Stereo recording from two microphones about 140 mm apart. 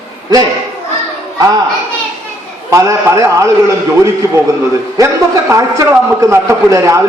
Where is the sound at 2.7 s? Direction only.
20° right (ahead or behind).